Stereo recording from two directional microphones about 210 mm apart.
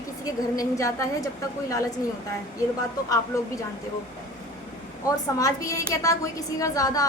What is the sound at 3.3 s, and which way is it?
Speech, 15° left (ahead or behind).